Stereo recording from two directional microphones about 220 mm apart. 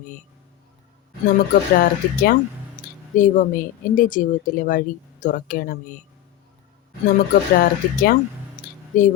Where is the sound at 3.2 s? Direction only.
35° left (ahead or behind).